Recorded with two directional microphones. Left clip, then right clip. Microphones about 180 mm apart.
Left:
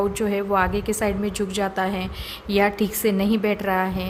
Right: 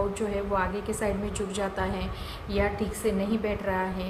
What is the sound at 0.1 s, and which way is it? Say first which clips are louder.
A woman's voice: left 6 dB; 50° left (ahead or behind).